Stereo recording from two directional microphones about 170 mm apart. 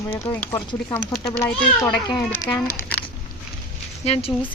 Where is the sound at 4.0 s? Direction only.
35° left (ahead or behind).